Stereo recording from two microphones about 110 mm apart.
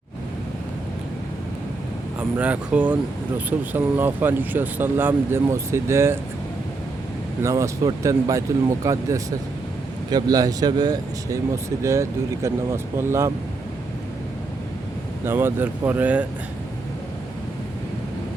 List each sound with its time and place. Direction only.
2.4 s speech: 15° right (ahead or behind)
7.4 s speech: 25° right (ahead or behind)
15.2 s speech: 20° right (ahead or behind)